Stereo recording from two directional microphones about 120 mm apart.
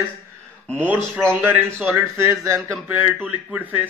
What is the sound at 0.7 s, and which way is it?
A man's voice, 15° right (ahead or behind).